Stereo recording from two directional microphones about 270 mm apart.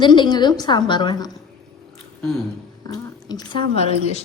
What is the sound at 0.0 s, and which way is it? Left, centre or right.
A woman's voice, centre.